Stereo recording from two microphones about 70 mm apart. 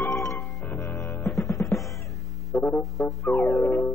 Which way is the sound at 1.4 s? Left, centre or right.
Left.